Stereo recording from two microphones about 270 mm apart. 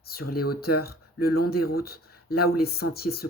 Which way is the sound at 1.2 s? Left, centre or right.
Left.